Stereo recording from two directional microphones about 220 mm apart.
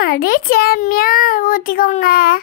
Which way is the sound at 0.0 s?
40° left (ahead or behind).